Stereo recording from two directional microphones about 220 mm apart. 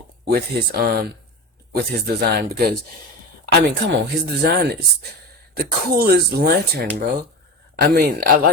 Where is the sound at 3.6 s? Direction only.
50° right (ahead or behind).